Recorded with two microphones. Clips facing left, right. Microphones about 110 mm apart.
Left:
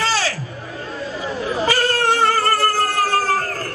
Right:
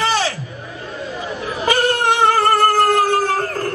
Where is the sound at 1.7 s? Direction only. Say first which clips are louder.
Right 4 dB; 20° right (ahead or behind).